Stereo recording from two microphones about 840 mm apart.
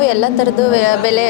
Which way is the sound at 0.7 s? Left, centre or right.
Left.